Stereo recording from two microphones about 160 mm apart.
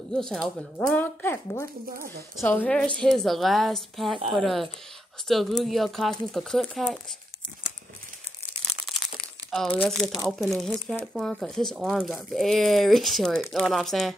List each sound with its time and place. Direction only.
0.1 s speech: 5° left (ahead or behind)
8.8 s speech: centre (ahead or behind)